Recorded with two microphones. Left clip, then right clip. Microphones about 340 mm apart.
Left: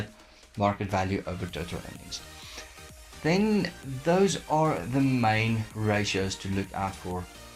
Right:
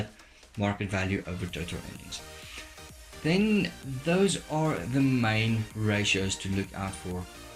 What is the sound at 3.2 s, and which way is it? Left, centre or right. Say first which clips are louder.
Speech: left 1 dB; centre.